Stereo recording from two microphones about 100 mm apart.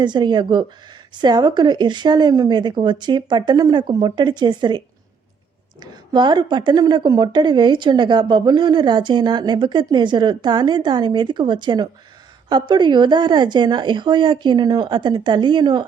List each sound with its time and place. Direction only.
0.0 s a woman's voice: 50° right (ahead or behind)
5.8 s a woman's voice: 45° right (ahead or behind)